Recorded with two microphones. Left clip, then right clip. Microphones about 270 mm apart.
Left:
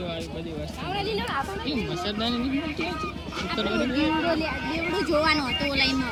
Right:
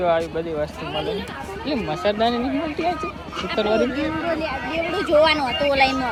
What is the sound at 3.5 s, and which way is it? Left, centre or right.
Speech, centre.